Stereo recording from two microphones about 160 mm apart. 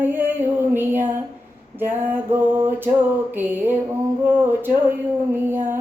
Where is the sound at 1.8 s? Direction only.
10° right (ahead or behind).